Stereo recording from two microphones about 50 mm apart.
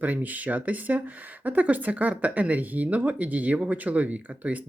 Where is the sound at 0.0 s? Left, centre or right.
Right.